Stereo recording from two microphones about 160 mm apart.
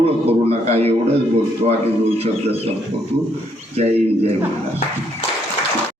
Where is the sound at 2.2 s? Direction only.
40° right (ahead or behind).